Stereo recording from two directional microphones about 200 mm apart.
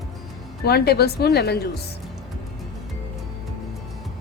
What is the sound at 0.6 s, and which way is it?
Speech, 50° left (ahead or behind).